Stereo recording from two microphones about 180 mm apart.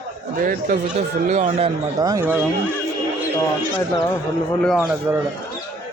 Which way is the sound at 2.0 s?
20° right (ahead or behind).